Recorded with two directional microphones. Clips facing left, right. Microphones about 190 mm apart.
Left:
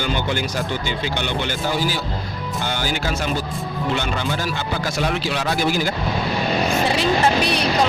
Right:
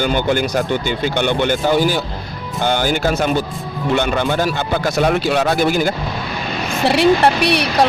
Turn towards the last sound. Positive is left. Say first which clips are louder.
# right 3 dB
turn(degrees=-70)  # may be behind; listen again after turning